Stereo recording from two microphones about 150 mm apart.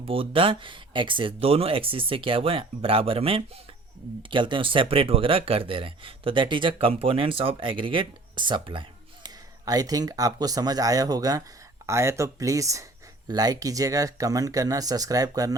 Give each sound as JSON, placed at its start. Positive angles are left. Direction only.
{"t": 0.0, "sound": "speech", "side_deg": -35}